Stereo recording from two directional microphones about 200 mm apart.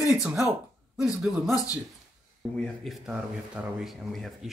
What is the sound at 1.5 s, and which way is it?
Speech, 15° left (ahead or behind).